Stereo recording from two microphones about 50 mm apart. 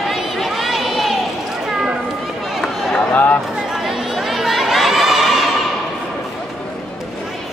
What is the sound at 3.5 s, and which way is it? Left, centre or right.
Chatter, centre.